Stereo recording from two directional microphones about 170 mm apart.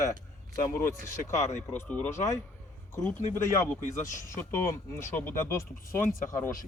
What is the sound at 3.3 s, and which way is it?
Speech, 15° left (ahead or behind).